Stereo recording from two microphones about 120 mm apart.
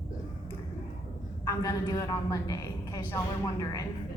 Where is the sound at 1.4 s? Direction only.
30° left (ahead or behind).